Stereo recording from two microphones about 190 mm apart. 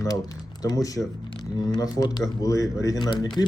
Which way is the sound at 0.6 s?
20° left (ahead or behind).